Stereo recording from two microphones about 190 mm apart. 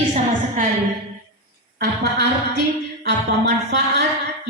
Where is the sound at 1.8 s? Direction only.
60° right (ahead or behind).